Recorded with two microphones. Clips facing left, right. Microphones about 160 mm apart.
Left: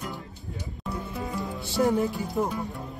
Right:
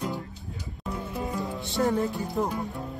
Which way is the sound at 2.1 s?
Centre (ahead or behind).